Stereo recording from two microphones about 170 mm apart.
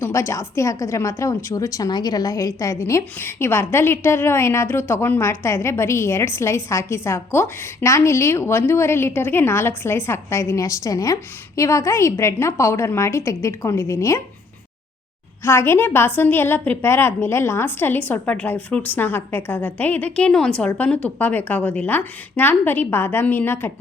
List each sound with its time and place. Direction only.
0.0 s a woman's voice: 15° left (ahead or behind)
15.4 s a woman's voice: 15° left (ahead or behind)